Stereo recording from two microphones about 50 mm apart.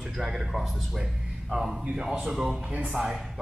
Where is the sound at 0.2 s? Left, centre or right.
Centre.